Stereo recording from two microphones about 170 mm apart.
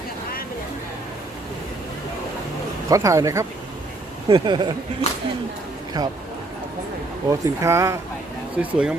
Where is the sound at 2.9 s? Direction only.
20° right (ahead or behind).